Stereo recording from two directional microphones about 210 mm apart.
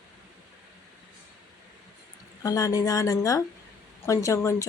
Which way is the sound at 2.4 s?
15° left (ahead or behind).